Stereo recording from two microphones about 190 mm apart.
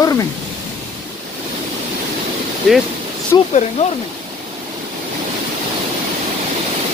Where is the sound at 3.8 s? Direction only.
35° left (ahead or behind).